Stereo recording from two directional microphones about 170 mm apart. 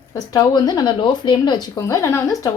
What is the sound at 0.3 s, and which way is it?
Speech, 25° left (ahead or behind).